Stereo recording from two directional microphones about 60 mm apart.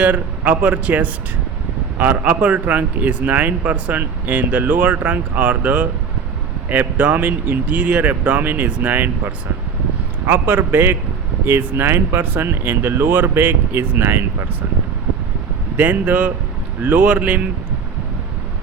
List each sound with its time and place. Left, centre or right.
0.0 s speech: right
12.2 s speech: right
15.8 s speech: right